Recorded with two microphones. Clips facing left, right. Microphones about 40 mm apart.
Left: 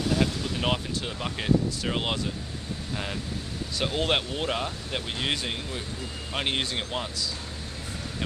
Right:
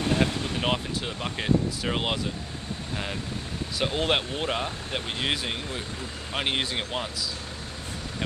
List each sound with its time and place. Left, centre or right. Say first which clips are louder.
0.0 s vehicle: right 1 dB; right
0.6 s speech: even; centre
3.7 s speech: right 1 dB; centre